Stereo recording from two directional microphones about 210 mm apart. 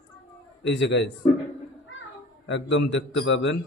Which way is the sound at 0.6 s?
60° left (ahead or behind).